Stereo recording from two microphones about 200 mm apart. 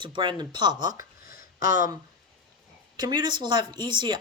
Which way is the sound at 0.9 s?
45° left (ahead or behind).